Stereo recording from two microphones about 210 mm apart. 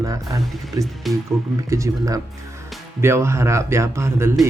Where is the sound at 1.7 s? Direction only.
15° right (ahead or behind).